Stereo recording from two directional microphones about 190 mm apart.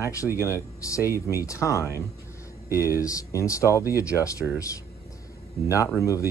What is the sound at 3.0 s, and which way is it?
Speech, 15° left (ahead or behind).